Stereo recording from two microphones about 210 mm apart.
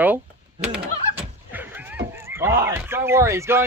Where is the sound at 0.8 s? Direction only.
30° right (ahead or behind).